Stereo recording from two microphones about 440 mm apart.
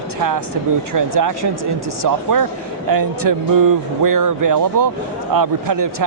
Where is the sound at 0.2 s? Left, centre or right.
Right.